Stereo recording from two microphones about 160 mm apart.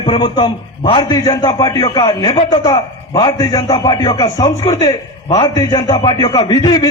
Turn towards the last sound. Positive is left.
turn(degrees=25)  # may be behind; listen again after turning